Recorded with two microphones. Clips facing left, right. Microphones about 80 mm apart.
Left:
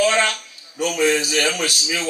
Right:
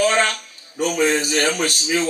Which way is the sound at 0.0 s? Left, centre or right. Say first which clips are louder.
Even; right.